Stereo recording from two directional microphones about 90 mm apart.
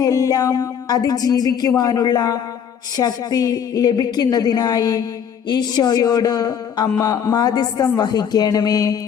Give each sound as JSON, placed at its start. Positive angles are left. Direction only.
{"t": 0.0, "sound": "speech", "side_deg": 40}